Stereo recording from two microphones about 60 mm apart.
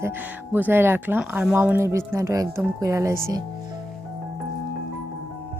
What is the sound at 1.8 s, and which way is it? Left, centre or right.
Speech, right.